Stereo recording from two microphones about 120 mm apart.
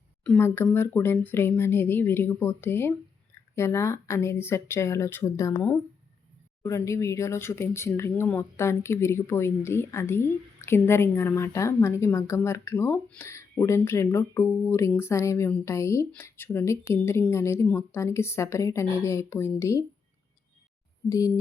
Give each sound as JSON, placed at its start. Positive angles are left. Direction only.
{"t": 0.3, "sound": "speech", "side_deg": 20}
{"t": 21.1, "sound": "speech", "side_deg": 30}